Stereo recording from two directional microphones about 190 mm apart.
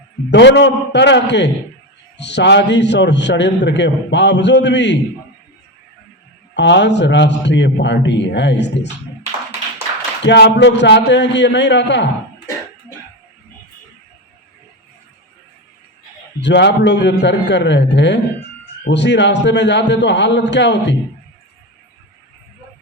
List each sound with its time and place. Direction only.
0.3 s a man's voice: 65° left (ahead or behind)
6.5 s a man's voice: 65° left (ahead or behind)
10.2 s a man's voice: 65° left (ahead or behind)
16.4 s a man's voice: 65° left (ahead or behind)